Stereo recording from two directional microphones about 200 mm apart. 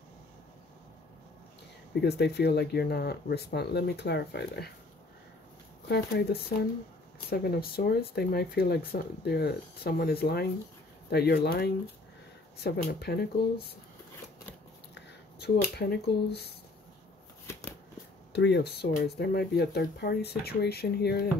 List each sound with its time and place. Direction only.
2.0 s speech: 55° left (ahead or behind)
5.9 s speech: 55° left (ahead or behind)
15.0 s speech: 55° left (ahead or behind)
18.3 s speech: 60° left (ahead or behind)